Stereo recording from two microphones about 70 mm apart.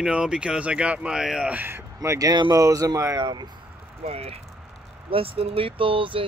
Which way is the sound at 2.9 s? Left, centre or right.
Right.